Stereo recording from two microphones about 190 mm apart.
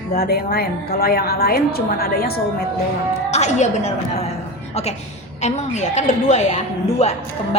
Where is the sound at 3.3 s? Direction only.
35° left (ahead or behind).